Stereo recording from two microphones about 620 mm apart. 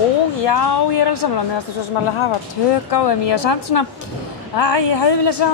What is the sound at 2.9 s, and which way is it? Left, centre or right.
A woman's voice, left.